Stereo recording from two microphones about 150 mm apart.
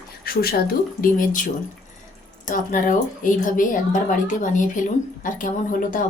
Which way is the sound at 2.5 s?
60° left (ahead or behind).